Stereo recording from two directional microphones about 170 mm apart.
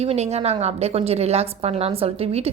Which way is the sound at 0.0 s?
40° right (ahead or behind).